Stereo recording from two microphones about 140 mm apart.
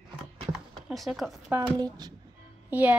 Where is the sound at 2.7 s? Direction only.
10° right (ahead or behind).